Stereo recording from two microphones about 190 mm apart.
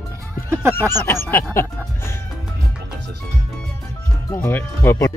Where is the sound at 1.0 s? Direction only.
10° left (ahead or behind).